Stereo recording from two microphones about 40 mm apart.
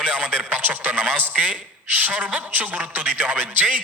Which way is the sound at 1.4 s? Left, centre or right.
Right.